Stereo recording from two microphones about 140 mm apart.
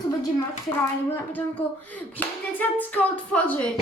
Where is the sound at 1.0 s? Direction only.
10° left (ahead or behind).